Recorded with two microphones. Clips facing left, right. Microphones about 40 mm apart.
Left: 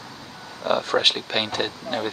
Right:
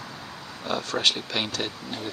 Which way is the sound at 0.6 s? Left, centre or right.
Left.